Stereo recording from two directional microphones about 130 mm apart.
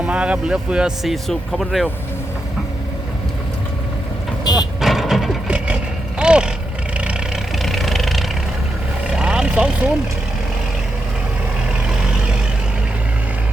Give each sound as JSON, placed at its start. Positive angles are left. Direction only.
{"t": 0.0, "sound": "speech", "side_deg": -10}
{"t": 4.5, "sound": "speech", "side_deg": 30}
{"t": 4.8, "sound": "vehicle", "side_deg": 0}
{"t": 7.6, "sound": "vehicle", "side_deg": 0}